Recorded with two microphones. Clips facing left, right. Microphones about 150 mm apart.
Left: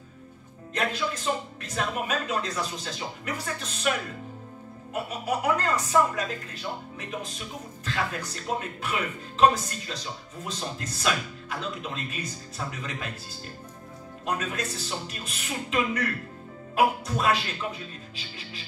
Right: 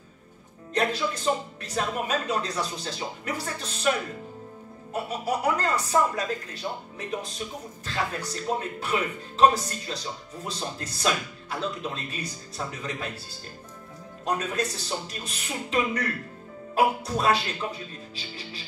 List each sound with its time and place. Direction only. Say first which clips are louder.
0.7 s speech: right 3 dB; 35° right (ahead or behind)
4.9 s speech: right 1 dB; 35° right (ahead or behind)
14.2 s speech: right 3 dB; 35° right (ahead or behind)